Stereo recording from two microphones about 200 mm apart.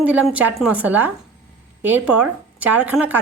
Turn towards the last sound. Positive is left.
turn(degrees=-10)  # may be behind; listen again after turning